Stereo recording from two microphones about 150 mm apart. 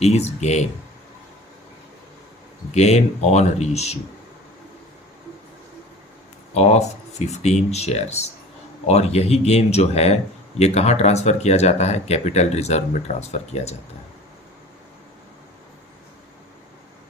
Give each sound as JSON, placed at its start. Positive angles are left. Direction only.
{"t": 0.0, "sound": "speech", "side_deg": 45}
{"t": 2.7, "sound": "speech", "side_deg": 45}
{"t": 6.5, "sound": "speech", "side_deg": 45}